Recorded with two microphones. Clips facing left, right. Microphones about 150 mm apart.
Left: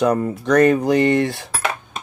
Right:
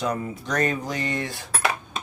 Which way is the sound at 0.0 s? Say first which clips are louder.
Left 9 dB; 60° left (ahead or behind).